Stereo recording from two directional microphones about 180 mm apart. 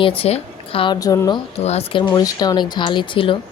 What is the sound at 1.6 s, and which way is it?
Speech, 35° left (ahead or behind).